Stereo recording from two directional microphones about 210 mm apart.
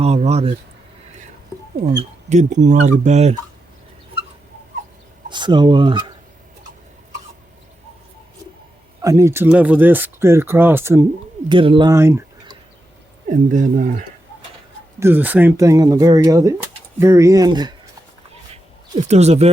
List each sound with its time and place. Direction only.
0.0 s speech: 30° right (ahead or behind)
2.3 s speech: 35° right (ahead or behind)
5.3 s speech: 20° right (ahead or behind)
9.0 s speech: 15° right (ahead or behind)
11.4 s speech: 25° right (ahead or behind)
13.2 s speech: 35° right (ahead or behind)
14.9 s speech: 10° right (ahead or behind)
18.9 s speech: 30° right (ahead or behind)